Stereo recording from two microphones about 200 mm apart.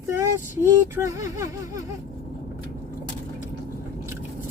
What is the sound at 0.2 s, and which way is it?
Speech, 15° right (ahead or behind).